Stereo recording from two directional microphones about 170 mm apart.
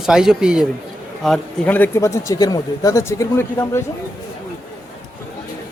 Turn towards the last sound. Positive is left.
turn(degrees=15)  # may be behind; listen again after turning